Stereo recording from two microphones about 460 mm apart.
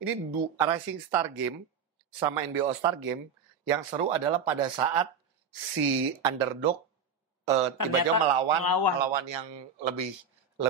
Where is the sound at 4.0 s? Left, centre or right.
Right.